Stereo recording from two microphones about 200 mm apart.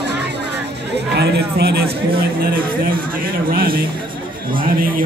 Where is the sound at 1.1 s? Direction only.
55° right (ahead or behind).